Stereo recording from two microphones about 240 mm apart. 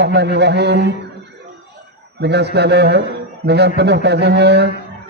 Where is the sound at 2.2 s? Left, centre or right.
Right.